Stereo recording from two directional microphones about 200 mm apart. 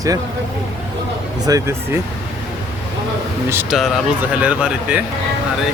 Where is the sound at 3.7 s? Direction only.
5° right (ahead or behind).